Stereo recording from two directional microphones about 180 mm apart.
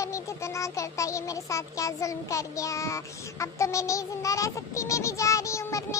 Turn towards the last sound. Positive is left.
turn(degrees=15)  # may be behind; listen again after turning